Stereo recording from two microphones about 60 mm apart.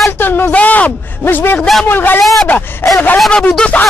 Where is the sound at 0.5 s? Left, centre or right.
Left.